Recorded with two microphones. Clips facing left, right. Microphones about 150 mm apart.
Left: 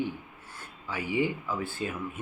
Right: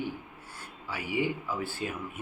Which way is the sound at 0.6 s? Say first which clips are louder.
Left 3 dB; 10° right (ahead or behind).